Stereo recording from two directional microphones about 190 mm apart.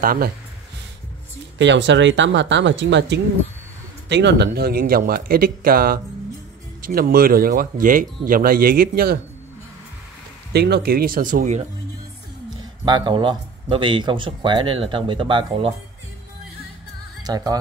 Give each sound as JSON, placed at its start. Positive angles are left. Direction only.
{"t": 0.0, "sound": "speech", "side_deg": -50}
{"t": 1.6, "sound": "speech", "side_deg": -70}
{"t": 10.5, "sound": "speech", "side_deg": -60}
{"t": 12.4, "sound": "speech", "side_deg": -20}
{"t": 17.2, "sound": "speech", "side_deg": -20}